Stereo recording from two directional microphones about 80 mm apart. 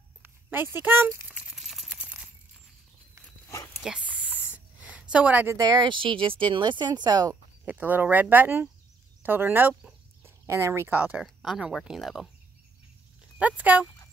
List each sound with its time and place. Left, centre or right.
0.2 s speech: right
1.5 s a sound: centre
3.4 s a sound: left
3.8 s dog: centre
4.7 s a sound: centre
5.1 s a woman's voice: centre
5.5 s speech: right
5.9 s speech: right
7.6 s speech: right
10.2 s a sound: right
10.9 s speech: centre
11.2 s speech: centre
13.4 s speech: centre